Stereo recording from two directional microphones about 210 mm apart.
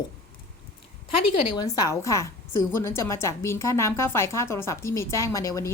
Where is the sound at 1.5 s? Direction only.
15° left (ahead or behind).